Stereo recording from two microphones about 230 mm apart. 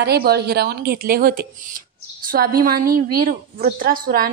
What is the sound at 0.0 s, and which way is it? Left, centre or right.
A woman's voice, right.